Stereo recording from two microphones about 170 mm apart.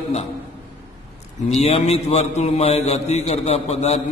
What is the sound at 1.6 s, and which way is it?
A man's voice, 35° left (ahead or behind).